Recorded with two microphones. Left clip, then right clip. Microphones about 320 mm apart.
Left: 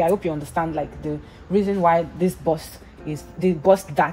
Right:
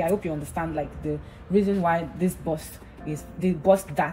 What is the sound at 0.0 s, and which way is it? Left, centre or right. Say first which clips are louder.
Speech: left 5 dB; left.